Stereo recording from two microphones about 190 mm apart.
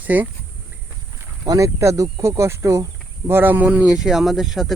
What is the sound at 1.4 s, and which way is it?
Speech, 15° right (ahead or behind).